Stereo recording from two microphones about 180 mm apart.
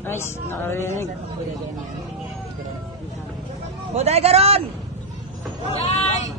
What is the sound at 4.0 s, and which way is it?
Speech, 35° right (ahead or behind).